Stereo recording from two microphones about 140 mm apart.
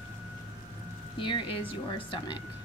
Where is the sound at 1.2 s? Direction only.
35° left (ahead or behind).